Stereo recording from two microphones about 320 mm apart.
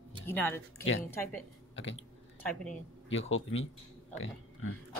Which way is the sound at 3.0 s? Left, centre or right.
Left.